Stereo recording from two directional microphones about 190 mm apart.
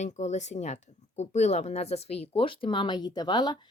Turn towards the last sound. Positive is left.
turn(degrees=20)  # may be behind; listen again after turning